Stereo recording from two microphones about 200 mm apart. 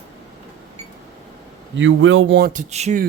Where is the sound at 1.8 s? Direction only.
75° right (ahead or behind).